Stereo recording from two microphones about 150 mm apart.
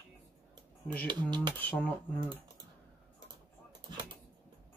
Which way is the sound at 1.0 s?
30° right (ahead or behind).